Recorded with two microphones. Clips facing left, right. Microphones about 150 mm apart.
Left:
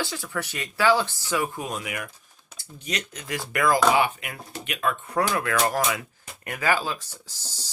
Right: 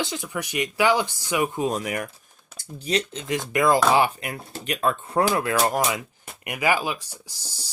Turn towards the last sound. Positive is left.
turn(degrees=-10)  # may be behind; listen again after turning